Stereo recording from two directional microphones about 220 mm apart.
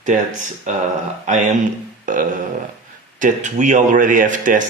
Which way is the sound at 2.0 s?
35° right (ahead or behind).